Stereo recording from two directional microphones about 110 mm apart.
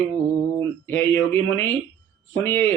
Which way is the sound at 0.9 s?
20° left (ahead or behind).